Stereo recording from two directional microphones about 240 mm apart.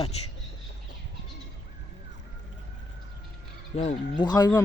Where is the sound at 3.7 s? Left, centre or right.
Left.